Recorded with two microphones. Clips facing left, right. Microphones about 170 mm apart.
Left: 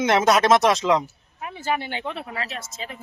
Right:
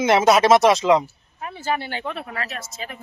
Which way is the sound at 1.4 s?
15° left (ahead or behind).